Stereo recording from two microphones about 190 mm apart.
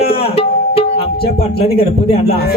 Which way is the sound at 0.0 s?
30° left (ahead or behind).